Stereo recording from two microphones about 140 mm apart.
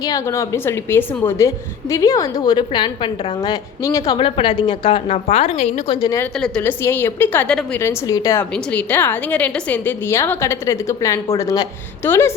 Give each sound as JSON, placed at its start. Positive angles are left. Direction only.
{"t": 0.0, "sound": "a woman's voice", "side_deg": 25}
{"t": 4.2, "sound": "a woman's voice", "side_deg": 35}
{"t": 5.9, "sound": "a woman's voice", "side_deg": 25}
{"t": 6.6, "sound": "a woman's voice", "side_deg": 15}
{"t": 7.8, "sound": "a woman's voice", "side_deg": 20}
{"t": 8.4, "sound": "a woman's voice", "side_deg": 10}